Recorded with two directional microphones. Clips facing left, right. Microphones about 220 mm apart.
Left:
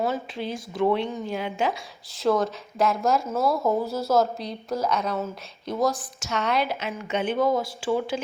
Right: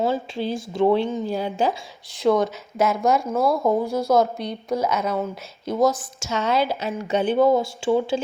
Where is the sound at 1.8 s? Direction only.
Centre (ahead or behind).